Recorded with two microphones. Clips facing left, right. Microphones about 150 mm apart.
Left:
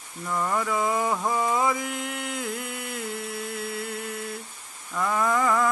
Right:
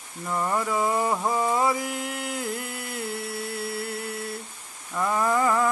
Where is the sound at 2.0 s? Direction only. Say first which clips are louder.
Right 1 dB; 40° right (ahead or behind).